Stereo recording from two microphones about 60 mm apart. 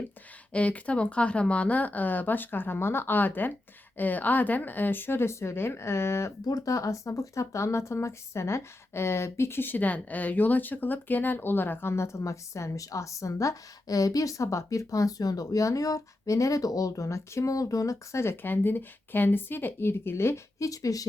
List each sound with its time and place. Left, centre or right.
0.5 s a woman's voice: left
6.5 s speech: left
18.2 s a woman's voice: left
20.6 s speech: left